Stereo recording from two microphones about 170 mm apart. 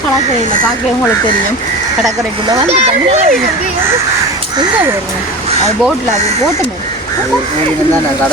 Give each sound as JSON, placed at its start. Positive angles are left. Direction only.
{"t": 2.6, "sound": "speech", "side_deg": -40}